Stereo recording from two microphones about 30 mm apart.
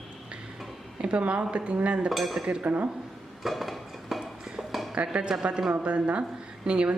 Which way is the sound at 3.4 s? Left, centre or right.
Centre.